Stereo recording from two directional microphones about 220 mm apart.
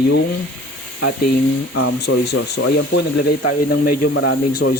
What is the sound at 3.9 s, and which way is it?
Speech, 65° left (ahead or behind).